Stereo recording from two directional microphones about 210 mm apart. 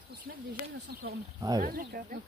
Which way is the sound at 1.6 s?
45° right (ahead or behind).